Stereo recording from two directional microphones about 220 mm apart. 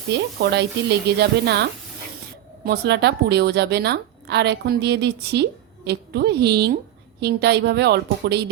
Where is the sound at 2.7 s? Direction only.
50° right (ahead or behind).